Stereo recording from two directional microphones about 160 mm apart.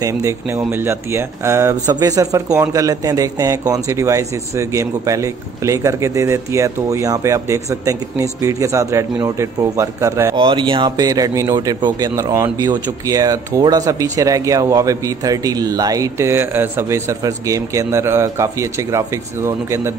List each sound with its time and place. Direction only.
0.0 s speech: 20° right (ahead or behind)
10.3 s speech: 30° right (ahead or behind)